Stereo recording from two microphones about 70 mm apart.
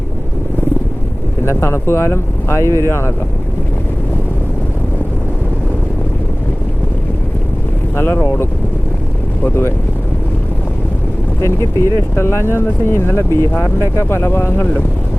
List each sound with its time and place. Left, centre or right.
1.5 s speech: left
7.9 s speech: left
11.3 s speech: left